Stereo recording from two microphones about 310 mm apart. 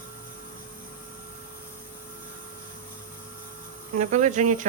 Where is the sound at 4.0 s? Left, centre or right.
Right.